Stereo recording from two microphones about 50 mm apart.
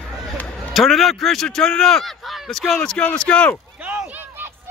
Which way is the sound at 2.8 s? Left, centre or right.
Centre.